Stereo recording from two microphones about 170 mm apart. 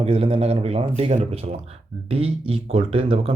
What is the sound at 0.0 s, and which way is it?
Speech, 35° right (ahead or behind).